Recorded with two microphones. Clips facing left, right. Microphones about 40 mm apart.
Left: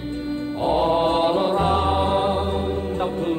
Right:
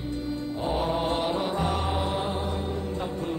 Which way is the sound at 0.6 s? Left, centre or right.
Left.